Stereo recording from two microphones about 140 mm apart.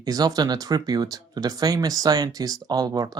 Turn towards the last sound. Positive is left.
turn(degrees=-30)  # may be behind; listen again after turning